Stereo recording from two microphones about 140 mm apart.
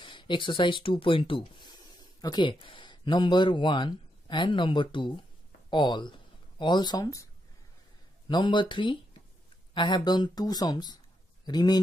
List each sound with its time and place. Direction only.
0.0 s speech: 35° left (ahead or behind)
8.3 s speech: 30° left (ahead or behind)